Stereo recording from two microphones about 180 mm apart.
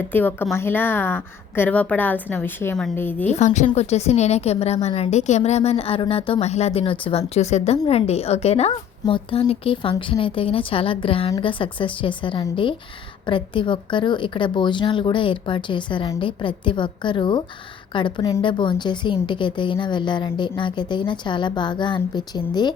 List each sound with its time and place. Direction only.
0.1 s a woman's voice: 10° left (ahead or behind)
3.3 s a woman's voice: 40° left (ahead or behind); by 22.7 s 25° left (ahead or behind)